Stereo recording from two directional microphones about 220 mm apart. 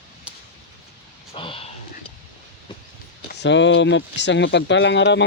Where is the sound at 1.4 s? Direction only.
25° left (ahead or behind).